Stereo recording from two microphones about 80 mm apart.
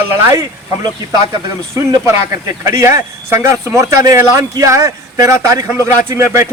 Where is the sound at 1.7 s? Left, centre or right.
Right.